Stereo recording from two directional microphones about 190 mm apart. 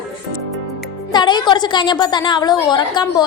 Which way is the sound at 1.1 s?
25° left (ahead or behind).